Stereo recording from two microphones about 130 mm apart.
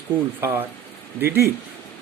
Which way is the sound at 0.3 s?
20° right (ahead or behind).